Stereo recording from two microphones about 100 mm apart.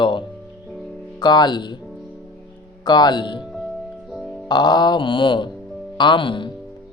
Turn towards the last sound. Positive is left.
turn(degrees=55)  # may be behind; listen again after turning